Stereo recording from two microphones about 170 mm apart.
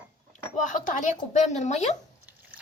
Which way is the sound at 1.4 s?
45° left (ahead or behind).